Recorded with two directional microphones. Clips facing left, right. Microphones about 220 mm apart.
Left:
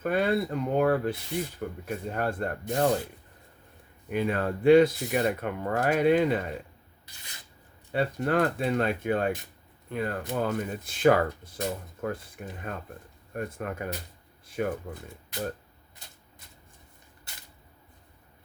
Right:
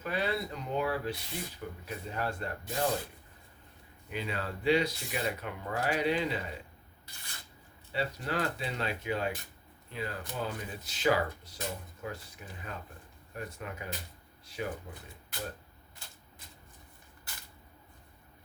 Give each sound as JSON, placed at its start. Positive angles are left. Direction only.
{"t": 0.0, "sound": "speech", "side_deg": 50}
{"t": 4.1, "sound": "speech", "side_deg": 50}
{"t": 7.9, "sound": "speech", "side_deg": 55}